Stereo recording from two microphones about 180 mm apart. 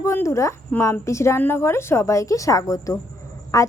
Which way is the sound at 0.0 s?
15° left (ahead or behind).